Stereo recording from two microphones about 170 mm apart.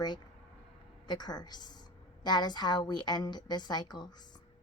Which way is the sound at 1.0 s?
25° left (ahead or behind).